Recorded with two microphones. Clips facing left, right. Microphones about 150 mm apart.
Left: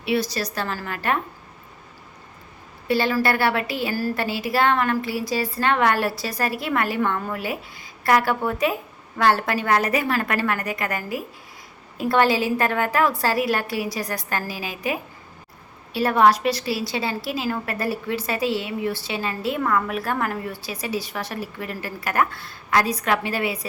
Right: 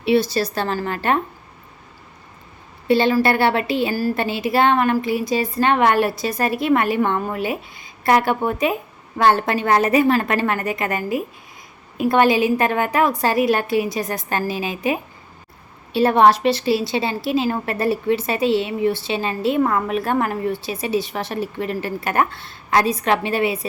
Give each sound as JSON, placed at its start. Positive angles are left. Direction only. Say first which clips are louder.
{"t": 0.0, "sound": "a woman's voice", "louder": "right 6 dB", "side_deg": -25}
{"t": 2.8, "sound": "a woman's voice", "louder": "right 5 dB", "side_deg": -25}